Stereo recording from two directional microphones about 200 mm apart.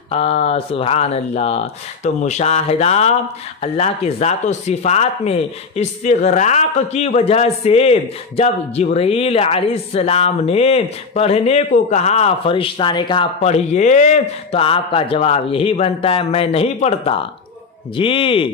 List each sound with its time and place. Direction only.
0.1 s speech: 30° left (ahead or behind)